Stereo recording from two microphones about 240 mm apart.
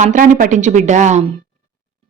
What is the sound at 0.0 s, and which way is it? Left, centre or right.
A woman's voice, right.